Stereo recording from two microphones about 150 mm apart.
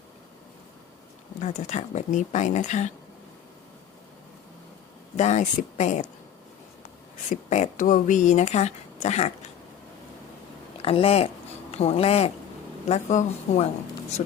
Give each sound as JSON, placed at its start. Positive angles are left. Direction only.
{"t": 1.4, "sound": "speech", "side_deg": 55}
{"t": 5.1, "sound": "speech", "side_deg": 50}
{"t": 7.3, "sound": "speech", "side_deg": 55}
{"t": 10.8, "sound": "speech", "side_deg": 40}